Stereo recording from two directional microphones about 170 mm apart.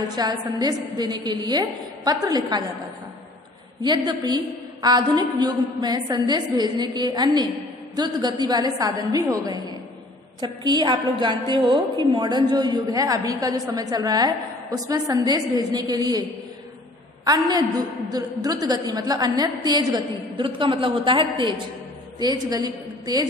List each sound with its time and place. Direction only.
0.1 s a woman's voice: 25° right (ahead or behind)
3.8 s a woman's voice: 25° right (ahead or behind)
10.4 s a woman's voice: 25° right (ahead or behind)